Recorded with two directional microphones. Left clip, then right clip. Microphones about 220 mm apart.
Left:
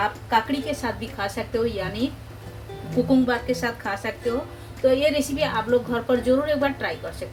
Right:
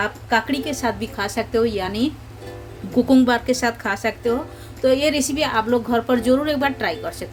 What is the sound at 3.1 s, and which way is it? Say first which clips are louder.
A woman's voice: right 5 dB; 55° right (ahead or behind).